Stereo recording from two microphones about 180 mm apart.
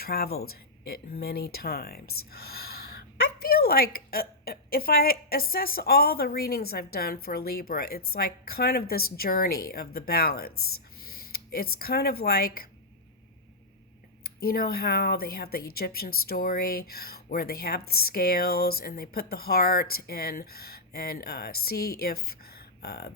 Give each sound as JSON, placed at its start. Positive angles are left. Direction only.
{"t": 0.0, "sound": "speech", "side_deg": 60}
{"t": 14.3, "sound": "speech", "side_deg": 55}